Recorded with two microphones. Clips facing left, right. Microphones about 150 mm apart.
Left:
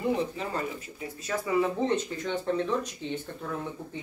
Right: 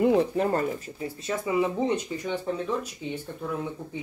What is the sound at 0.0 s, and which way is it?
Speech, 65° right (ahead or behind).